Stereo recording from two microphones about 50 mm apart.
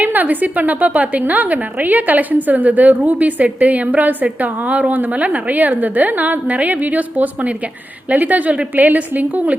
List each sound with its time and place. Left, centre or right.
0.0 s a woman's voice: right